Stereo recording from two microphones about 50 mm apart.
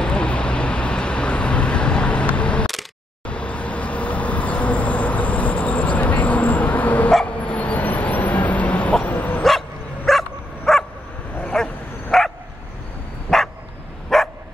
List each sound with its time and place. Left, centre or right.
0.0 s vehicle: centre
7.2 s a sound: left
9.4 s bow-wow: centre
13.3 s dog: centre